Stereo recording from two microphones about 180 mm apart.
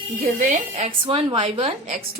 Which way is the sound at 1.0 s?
30° right (ahead or behind).